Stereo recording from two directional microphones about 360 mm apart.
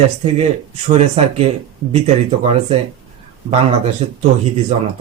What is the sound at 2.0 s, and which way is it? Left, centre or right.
Speech, centre.